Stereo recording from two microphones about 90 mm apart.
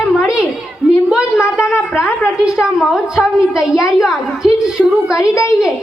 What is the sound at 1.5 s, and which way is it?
Speech, 25° left (ahead or behind).